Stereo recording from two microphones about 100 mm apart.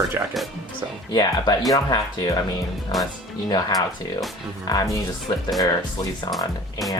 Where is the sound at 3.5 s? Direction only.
45° left (ahead or behind).